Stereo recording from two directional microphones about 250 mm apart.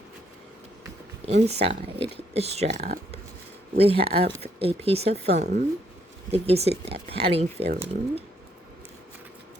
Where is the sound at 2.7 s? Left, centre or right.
Right.